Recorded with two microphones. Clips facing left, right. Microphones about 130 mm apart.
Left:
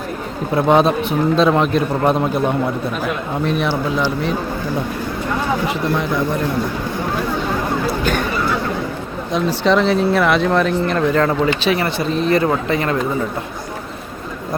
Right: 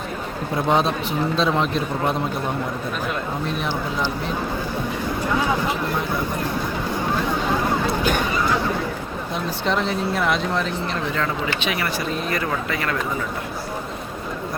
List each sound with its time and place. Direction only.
0.5 s a man's voice: 60° left (ahead or behind)
9.3 s speech: 90° left; by 13.0 s 25° left (ahead or behind)